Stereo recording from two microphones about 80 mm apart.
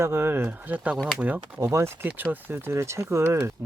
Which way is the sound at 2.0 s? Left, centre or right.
Right.